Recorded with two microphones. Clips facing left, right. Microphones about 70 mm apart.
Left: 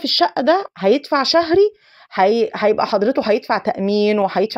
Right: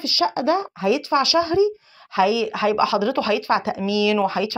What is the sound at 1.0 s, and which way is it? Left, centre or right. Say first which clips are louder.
Speech: left 3 dB; left.